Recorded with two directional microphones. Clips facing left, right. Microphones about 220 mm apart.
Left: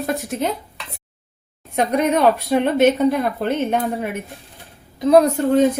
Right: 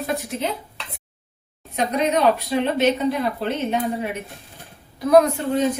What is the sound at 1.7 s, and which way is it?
A woman's voice, 55° left (ahead or behind).